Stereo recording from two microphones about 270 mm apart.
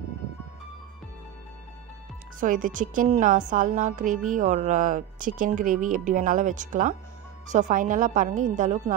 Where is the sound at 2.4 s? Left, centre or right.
Right.